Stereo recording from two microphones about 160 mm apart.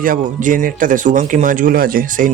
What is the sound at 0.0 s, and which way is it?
A man's voice, 60° right (ahead or behind).